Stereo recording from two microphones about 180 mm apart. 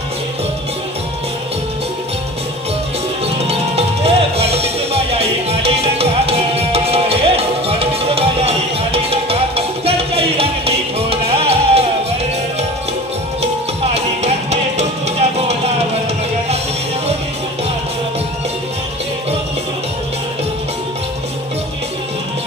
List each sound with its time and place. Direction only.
3.4 s music: 35° right (ahead or behind)
13.9 s music: 40° right (ahead or behind)